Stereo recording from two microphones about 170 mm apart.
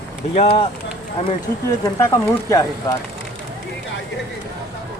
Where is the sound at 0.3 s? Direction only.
35° left (ahead or behind).